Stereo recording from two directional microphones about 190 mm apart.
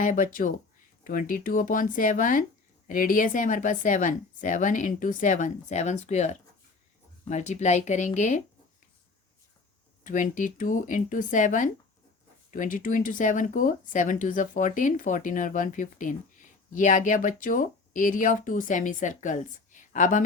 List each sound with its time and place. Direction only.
0.0 s speech: 45° left (ahead or behind)
10.0 s speech: 45° left (ahead or behind)